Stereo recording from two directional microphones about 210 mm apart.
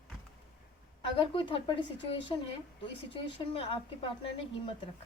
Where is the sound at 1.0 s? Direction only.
25° left (ahead or behind).